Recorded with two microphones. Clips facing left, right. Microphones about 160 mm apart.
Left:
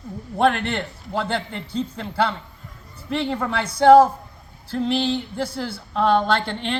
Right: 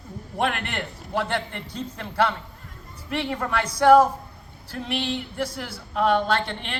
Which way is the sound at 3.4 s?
30° left (ahead or behind).